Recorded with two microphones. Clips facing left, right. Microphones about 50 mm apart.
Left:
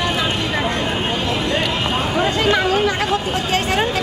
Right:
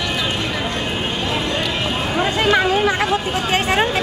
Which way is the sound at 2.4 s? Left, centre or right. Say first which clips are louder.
Right 2 dB; centre.